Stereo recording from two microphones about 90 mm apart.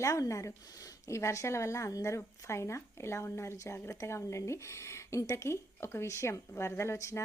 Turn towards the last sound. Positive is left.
turn(degrees=35)  # may be behind; listen again after turning